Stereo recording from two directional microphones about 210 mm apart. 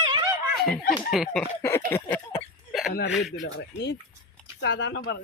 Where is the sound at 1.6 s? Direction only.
10° left (ahead or behind).